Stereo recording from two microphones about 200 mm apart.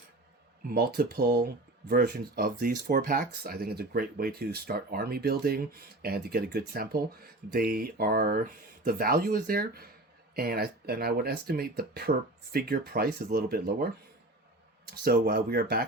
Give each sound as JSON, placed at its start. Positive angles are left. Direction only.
{"t": 0.7, "sound": "speech", "side_deg": -50}
{"t": 15.0, "sound": "speech", "side_deg": -50}